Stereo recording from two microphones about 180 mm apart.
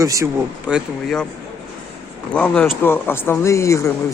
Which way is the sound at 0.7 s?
Centre (ahead or behind).